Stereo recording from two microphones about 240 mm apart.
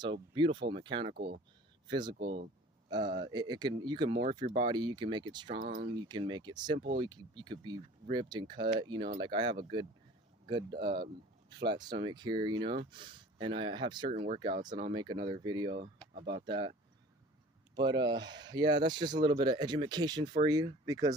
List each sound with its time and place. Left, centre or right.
0.0 s speech: centre
1.1 s speech: right
1.9 s speech: centre
17.7 s speech: centre